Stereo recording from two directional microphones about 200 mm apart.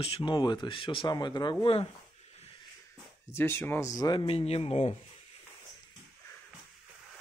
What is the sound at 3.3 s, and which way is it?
Speech, 10° left (ahead or behind).